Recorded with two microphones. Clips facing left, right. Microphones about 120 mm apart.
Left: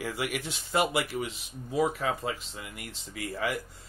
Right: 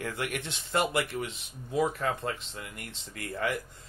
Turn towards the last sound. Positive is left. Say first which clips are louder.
# even
turn(degrees=0)  # may be behind; listen again after turning